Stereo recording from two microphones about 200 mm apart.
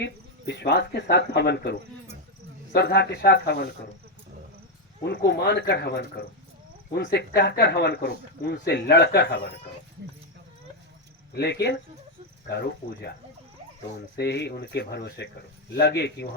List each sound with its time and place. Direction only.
0.0 s speech: 55° left (ahead or behind)
5.0 s speech: 55° left (ahead or behind)
11.3 s speech: 55° left (ahead or behind)
14.2 s speech: 55° left (ahead or behind)